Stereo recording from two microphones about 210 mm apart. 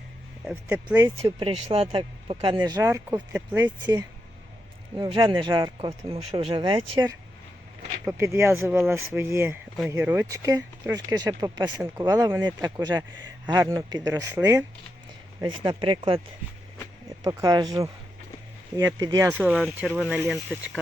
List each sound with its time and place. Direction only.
0.4 s speech: 5° right (ahead or behind)
1.4 s speech: 30° right (ahead or behind); by 3.7 s 10° right (ahead or behind)
4.9 s speech: 20° right (ahead or behind)
17.2 s speech: 15° right (ahead or behind)
18.8 s speech: 15° right (ahead or behind)